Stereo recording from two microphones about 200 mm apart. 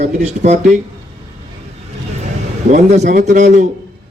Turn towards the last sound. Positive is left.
turn(degrees=-40)  # may be behind; listen again after turning